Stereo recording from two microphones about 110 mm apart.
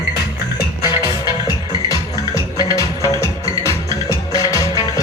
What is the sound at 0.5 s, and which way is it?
Music, 35° left (ahead or behind).